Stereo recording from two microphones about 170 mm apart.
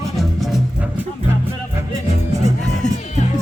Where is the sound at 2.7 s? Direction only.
45° left (ahead or behind).